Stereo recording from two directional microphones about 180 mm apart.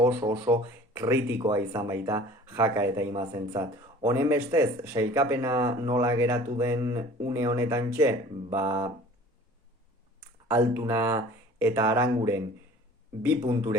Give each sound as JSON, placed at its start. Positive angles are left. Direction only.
{"t": 0.0, "sound": "speech", "side_deg": -10}
{"t": 10.5, "sound": "speech", "side_deg": -15}